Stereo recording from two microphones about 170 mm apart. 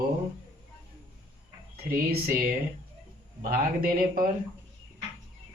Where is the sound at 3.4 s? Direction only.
60° right (ahead or behind).